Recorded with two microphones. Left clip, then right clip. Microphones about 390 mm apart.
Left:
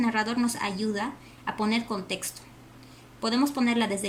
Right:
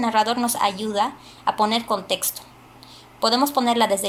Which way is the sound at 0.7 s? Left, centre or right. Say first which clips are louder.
Right 4 dB; right.